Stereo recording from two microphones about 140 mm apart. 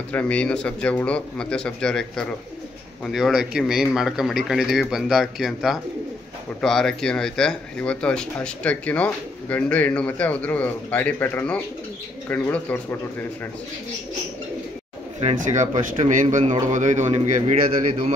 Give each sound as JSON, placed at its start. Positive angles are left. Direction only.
{"t": 0.1, "sound": "a man's voice", "side_deg": 10}
{"t": 15.1, "sound": "speech", "side_deg": -55}